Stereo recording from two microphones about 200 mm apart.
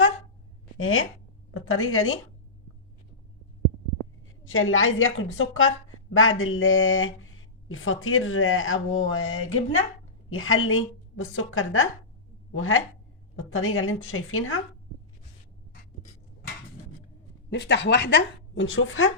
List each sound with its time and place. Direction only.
0.8 s speech: 90° left
4.4 s a woman's voice: 85° left
17.5 s a woman's voice: 60° left (ahead or behind)